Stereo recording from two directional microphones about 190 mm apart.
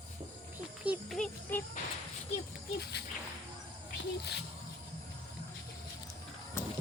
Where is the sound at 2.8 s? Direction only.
60° left (ahead or behind).